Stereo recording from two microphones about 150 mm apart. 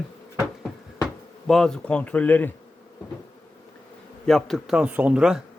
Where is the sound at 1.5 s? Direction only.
5° left (ahead or behind).